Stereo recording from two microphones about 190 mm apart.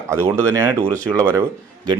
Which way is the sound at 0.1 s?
15° right (ahead or behind).